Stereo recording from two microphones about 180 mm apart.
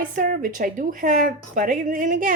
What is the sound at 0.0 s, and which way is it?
Speech, 50° right (ahead or behind).